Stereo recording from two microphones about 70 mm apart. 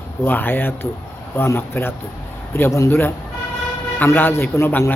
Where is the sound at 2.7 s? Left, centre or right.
Left.